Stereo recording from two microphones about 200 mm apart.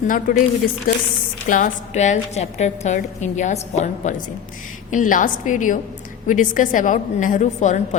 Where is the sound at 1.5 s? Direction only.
40° left (ahead or behind).